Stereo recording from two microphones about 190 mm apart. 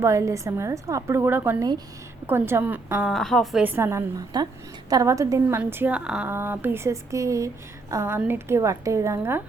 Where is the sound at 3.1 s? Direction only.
Centre (ahead or behind).